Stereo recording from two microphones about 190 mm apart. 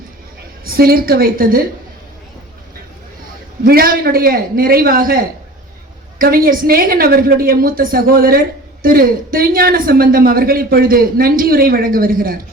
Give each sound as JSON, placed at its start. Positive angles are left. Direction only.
{"t": 0.6, "sound": "a woman's voice", "side_deg": -50}
{"t": 3.6, "sound": "a woman's voice", "side_deg": -50}